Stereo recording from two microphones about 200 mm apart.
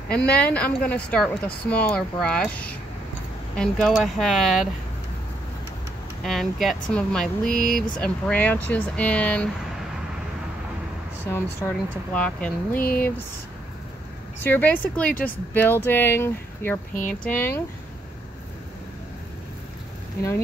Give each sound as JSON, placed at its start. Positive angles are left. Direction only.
{"t": 0.1, "sound": "speech", "side_deg": 5}
{"t": 6.2, "sound": "speech", "side_deg": 0}
{"t": 11.2, "sound": "speech", "side_deg": 10}
{"t": 12.7, "sound": "a sound", "side_deg": 50}
{"t": 14.4, "sound": "speech", "side_deg": 10}